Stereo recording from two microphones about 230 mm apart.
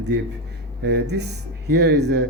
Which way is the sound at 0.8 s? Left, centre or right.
Right.